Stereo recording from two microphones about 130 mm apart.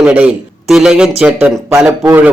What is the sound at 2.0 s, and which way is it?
Speech, 15° right (ahead or behind).